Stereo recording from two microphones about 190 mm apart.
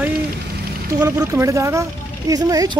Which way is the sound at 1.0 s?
15° right (ahead or behind).